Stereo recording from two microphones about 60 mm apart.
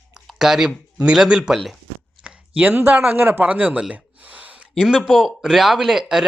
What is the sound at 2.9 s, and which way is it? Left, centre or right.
Speech, right.